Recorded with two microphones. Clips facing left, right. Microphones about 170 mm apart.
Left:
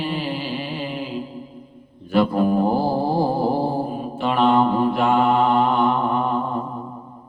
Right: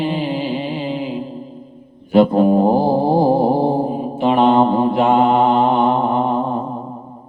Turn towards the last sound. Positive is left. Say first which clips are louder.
# right 4 dB
turn(degrees=-25)  # may be behind; listen again after turning